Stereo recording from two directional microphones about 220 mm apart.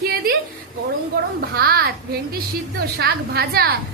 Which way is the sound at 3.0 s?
45° right (ahead or behind).